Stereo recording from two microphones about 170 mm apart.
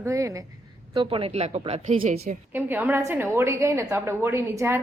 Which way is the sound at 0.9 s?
30° right (ahead or behind).